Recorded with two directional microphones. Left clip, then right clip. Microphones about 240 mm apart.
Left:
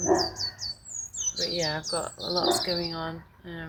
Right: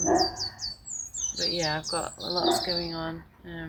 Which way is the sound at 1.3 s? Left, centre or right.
Centre.